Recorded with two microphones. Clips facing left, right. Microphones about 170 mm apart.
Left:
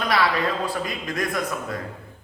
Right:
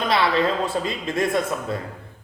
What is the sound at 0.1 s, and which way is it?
A man's voice, 25° right (ahead or behind).